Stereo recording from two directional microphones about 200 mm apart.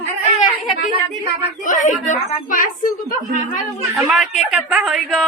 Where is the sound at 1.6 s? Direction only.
40° left (ahead or behind).